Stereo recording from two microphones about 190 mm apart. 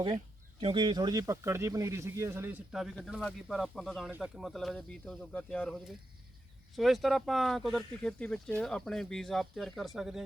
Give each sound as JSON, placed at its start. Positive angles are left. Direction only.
{"t": 0.6, "sound": "speech", "side_deg": -25}
{"t": 2.7, "sound": "speech", "side_deg": 0}